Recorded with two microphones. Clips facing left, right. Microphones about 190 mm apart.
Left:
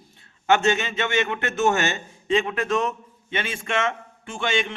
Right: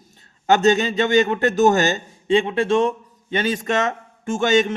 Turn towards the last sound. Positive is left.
turn(degrees=-40)  # may be behind; listen again after turning